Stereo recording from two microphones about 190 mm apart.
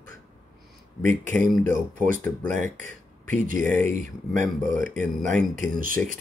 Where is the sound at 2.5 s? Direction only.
40° right (ahead or behind).